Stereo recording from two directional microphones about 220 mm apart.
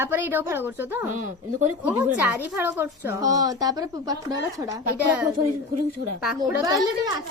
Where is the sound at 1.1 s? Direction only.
35° right (ahead or behind).